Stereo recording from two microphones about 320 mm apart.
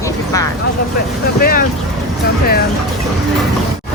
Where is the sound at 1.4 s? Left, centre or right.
Left.